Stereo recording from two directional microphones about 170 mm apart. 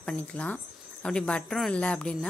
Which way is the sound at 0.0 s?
5° left (ahead or behind).